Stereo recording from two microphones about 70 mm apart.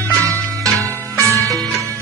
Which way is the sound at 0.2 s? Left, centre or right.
Right.